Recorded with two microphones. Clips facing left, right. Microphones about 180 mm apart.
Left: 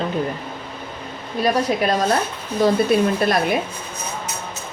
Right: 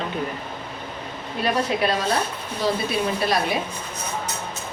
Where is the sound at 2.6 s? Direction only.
50° left (ahead or behind).